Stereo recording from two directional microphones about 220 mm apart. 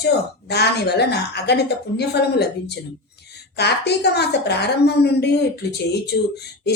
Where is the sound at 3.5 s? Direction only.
50° left (ahead or behind).